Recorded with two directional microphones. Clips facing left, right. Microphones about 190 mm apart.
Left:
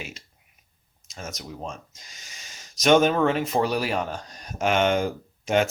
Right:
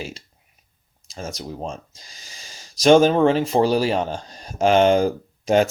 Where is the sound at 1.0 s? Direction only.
30° right (ahead or behind).